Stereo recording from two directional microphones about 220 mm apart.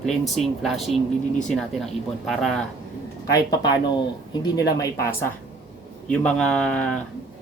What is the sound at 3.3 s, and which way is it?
A woman's voice, 15° left (ahead or behind).